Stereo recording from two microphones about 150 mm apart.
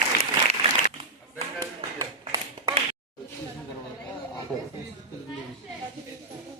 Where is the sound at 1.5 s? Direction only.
25° right (ahead or behind).